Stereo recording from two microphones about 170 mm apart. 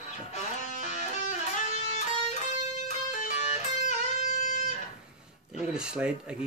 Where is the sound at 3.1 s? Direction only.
45° left (ahead or behind).